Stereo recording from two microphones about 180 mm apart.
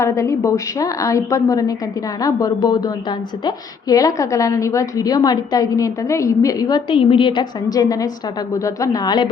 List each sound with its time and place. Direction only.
0.0 s a woman's voice: 15° left (ahead or behind)